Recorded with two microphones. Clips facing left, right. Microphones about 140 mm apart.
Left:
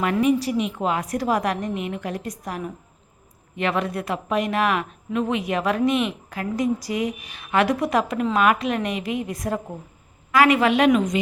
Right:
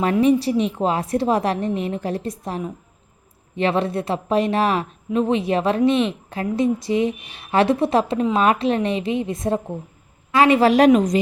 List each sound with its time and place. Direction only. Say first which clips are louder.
0.0 s a woman's voice: right 3 dB; 30° right (ahead or behind)